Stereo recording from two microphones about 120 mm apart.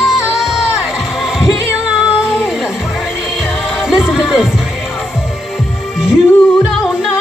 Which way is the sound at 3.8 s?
Centre (ahead or behind).